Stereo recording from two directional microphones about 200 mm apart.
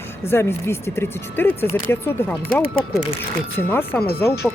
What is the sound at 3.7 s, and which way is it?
Speech, 10° left (ahead or behind).